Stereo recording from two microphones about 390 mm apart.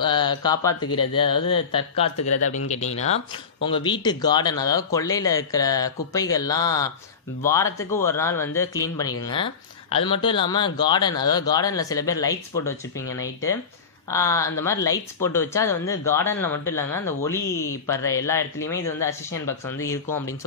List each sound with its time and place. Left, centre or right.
0.0 s speech: centre